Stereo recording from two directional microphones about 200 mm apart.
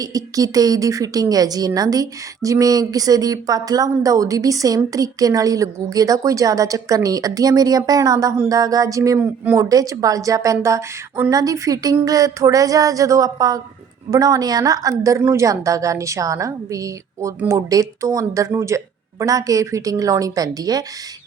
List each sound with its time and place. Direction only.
0.0 s speech: 15° right (ahead or behind)